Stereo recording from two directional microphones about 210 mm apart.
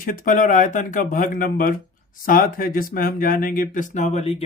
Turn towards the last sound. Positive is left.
turn(degrees=30)  # may be behind; listen again after turning